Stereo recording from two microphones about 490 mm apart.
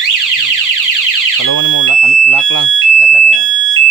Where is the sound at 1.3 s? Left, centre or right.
Left.